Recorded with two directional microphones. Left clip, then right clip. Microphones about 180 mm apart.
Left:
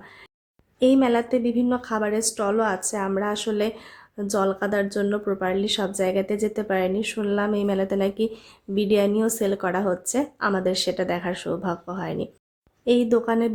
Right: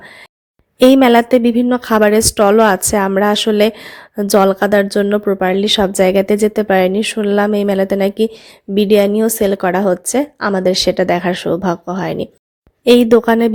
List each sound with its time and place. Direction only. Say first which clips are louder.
0.8 s a woman's voice: right 11 dB; 50° right (ahead or behind)